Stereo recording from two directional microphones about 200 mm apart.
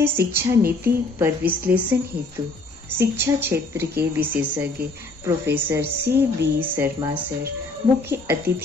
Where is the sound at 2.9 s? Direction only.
10° right (ahead or behind).